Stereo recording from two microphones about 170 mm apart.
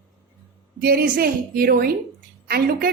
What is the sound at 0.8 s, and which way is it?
A woman's voice, 60° right (ahead or behind).